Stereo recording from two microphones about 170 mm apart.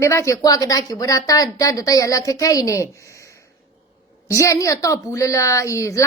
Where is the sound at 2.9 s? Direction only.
20° left (ahead or behind).